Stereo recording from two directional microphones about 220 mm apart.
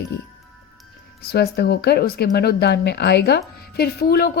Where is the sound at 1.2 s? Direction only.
45° left (ahead or behind).